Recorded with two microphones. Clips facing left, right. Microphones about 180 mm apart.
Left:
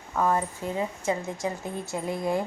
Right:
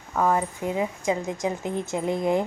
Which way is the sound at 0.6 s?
15° right (ahead or behind).